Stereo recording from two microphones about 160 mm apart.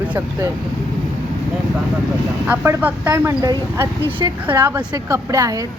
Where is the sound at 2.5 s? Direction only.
10° right (ahead or behind).